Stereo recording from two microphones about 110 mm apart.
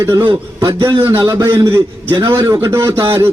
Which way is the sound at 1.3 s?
25° right (ahead or behind).